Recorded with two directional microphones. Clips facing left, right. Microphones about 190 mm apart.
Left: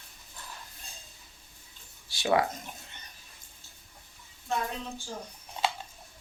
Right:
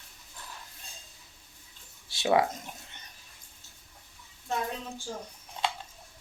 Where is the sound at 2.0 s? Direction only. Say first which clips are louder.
Right 1 dB; 25° right (ahead or behind).